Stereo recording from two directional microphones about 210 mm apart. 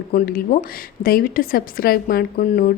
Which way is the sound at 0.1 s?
45° left (ahead or behind).